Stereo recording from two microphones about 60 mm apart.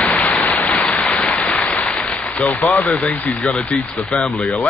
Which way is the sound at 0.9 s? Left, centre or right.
Left.